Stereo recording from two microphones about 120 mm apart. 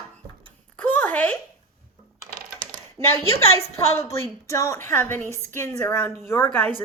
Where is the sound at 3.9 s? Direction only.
25° left (ahead or behind).